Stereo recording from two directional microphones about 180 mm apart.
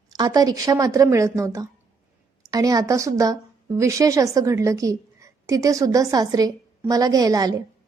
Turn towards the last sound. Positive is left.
turn(degrees=-20)  # may be behind; listen again after turning